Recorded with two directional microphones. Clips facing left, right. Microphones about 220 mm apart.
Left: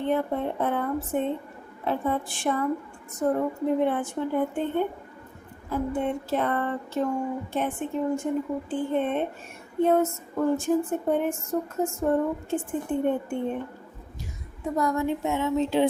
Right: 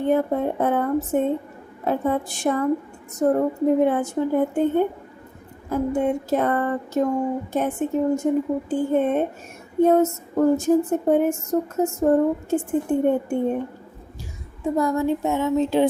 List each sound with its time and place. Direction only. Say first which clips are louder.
0.0 s a woman's voice: right 5 dB; 45° right (ahead or behind)
14.6 s speech: right 4 dB; 30° right (ahead or behind); by 15.9 s 45° right (ahead or behind)